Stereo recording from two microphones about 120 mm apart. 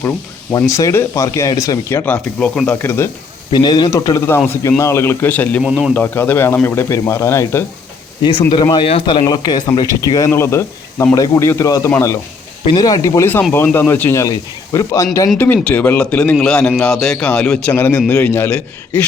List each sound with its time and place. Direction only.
0.7 s speech: 25° left (ahead or behind)
2.4 s a man's voice: 10° left (ahead or behind)
3.5 s speech: 35° left (ahead or behind)
4.3 s a man's voice: 20° left (ahead or behind)
5.6 s speech: 5° right (ahead or behind)
5.9 s speech: 15° left (ahead or behind)
8.2 s speech: 40° left (ahead or behind)
9.2 s speech: 35° left (ahead or behind)
15.4 s a man's voice: 15° left (ahead or behind)